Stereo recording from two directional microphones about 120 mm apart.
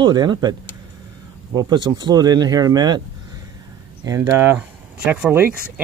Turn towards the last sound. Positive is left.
turn(degrees=-15)  # may be behind; listen again after turning